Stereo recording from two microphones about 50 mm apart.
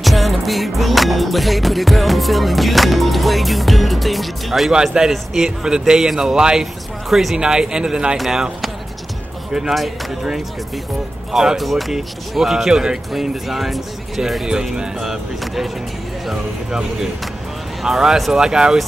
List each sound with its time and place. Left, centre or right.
0.0 s music: centre
4.7 s speech: centre
7.3 s speech: centre
9.5 s speech: centre
11.3 s speech: centre